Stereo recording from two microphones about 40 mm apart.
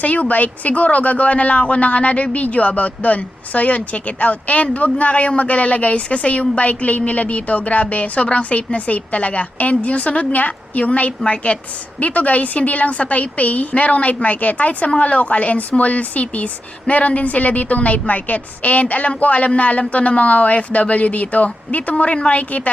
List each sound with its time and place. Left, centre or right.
0.0 s speech: left